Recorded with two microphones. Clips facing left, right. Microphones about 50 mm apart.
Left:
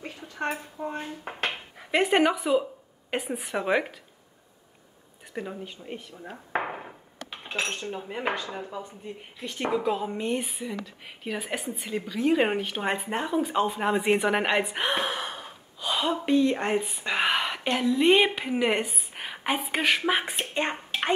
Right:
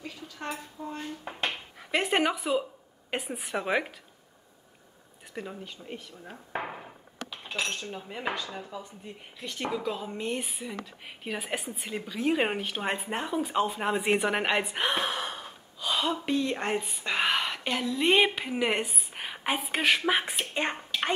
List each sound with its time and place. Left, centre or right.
0.0 s a woman's voice: left
1.5 s a woman's voice: centre
5.3 s speech: centre
6.6 s hammer: left
7.5 s cutlery: left
7.8 s speech: centre
10.2 s a woman's voice: centre